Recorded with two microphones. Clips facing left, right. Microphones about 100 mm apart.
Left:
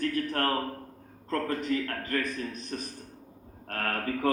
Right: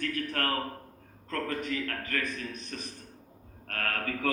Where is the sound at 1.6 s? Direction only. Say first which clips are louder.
Left 4 dB; 35° left (ahead or behind).